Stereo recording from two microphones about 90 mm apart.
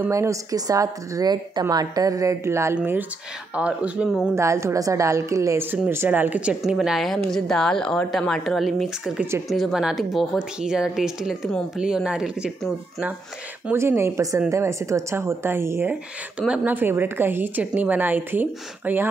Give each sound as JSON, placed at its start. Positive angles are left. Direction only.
{"t": 0.1, "sound": "a woman's voice", "side_deg": -35}
{"t": 2.7, "sound": "a woman's voice", "side_deg": -20}
{"t": 4.4, "sound": "a woman's voice", "side_deg": -30}
{"t": 5.9, "sound": "a woman's voice", "side_deg": -25}
{"t": 6.6, "sound": "a woman's voice", "side_deg": -5}
{"t": 13.7, "sound": "a woman's voice", "side_deg": -30}
{"t": 15.9, "sound": "a woman's voice", "side_deg": -10}